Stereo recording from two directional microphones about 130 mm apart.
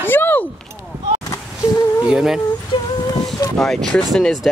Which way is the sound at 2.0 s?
5° right (ahead or behind).